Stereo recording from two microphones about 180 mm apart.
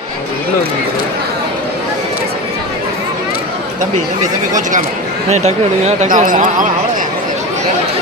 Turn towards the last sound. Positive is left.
turn(degrees=-45)  # may be behind; listen again after turning